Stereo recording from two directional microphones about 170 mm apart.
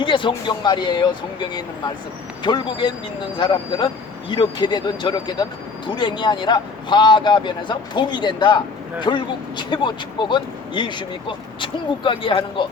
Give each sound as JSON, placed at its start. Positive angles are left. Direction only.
{"t": 0.0, "sound": "speech", "side_deg": 30}